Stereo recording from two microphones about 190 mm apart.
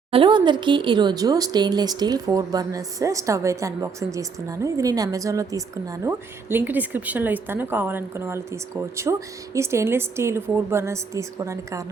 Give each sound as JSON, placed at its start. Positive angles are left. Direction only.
{"t": 0.1, "sound": "speech", "side_deg": -25}